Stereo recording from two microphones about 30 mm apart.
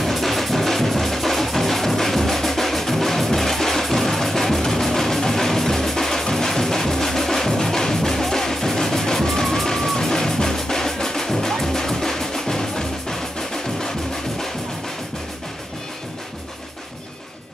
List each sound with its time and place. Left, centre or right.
0.0 s music: centre